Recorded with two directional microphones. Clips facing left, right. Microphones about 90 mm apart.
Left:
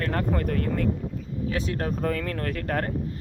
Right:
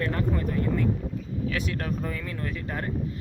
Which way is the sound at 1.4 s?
35° left (ahead or behind).